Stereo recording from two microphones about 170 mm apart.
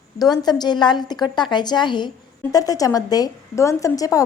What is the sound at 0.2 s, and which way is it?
A woman's voice, 25° left (ahead or behind).